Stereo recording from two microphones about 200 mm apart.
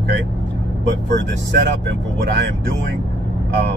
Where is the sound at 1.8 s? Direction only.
60° right (ahead or behind).